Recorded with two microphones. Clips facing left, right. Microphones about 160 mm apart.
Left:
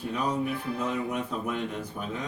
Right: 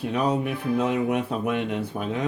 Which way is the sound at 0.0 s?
70° right (ahead or behind).